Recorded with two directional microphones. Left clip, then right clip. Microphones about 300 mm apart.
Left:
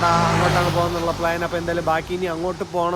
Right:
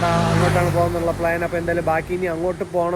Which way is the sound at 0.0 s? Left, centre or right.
Centre.